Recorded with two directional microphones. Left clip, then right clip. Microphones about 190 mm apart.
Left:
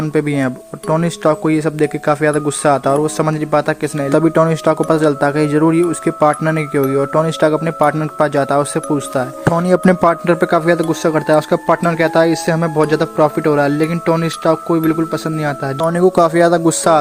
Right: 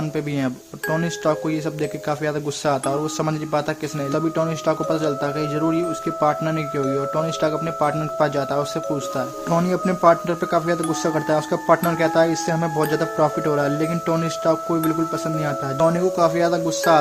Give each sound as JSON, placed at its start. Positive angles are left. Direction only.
{"t": 0.1, "sound": "speech", "side_deg": 30}
{"t": 9.6, "sound": "speech", "side_deg": 50}
{"t": 15.9, "sound": "speech", "side_deg": 50}